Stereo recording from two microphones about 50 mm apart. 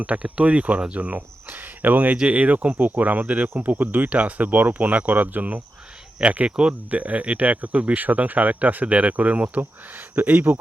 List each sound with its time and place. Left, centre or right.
0.0 s speech: right
1.5 s speech: right